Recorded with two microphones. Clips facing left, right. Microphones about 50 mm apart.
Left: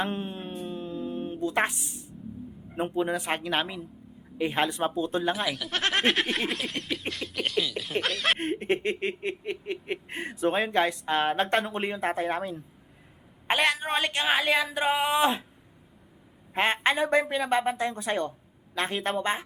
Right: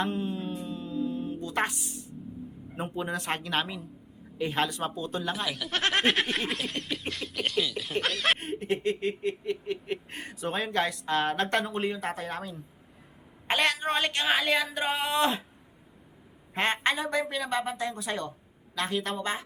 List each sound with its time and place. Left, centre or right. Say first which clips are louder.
0.0 s mantra: right 1 dB; left
1.4 s speech: left 6 dB; centre
2.9 s a woman's voice: left 3 dB; centre
5.3 s speech: left 2 dB; centre
8.4 s speech: left 3 dB; left
9.6 s speech: even; left
13.5 s a woman's voice: left 1 dB; centre
16.6 s a woman's voice: left 2 dB; centre
16.9 s speech: left 5 dB; left